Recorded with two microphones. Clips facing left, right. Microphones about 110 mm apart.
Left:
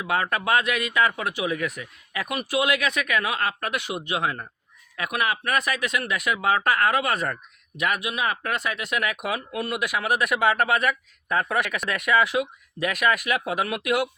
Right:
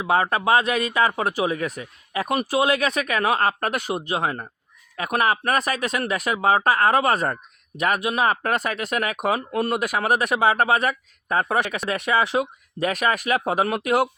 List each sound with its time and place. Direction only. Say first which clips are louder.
0.0 s speech: right 4 dB; 30° right (ahead or behind)